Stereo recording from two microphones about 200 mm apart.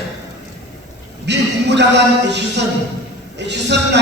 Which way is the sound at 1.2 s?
60° right (ahead or behind).